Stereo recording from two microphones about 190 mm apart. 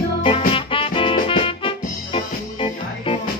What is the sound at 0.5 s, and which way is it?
Music, 30° left (ahead or behind).